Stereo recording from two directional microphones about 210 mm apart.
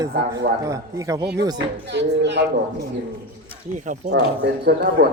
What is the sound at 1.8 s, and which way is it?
Speech, 55° right (ahead or behind).